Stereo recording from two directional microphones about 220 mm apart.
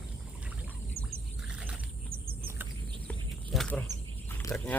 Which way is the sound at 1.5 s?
5° right (ahead or behind).